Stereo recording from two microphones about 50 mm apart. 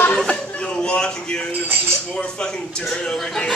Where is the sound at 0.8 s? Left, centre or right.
Centre.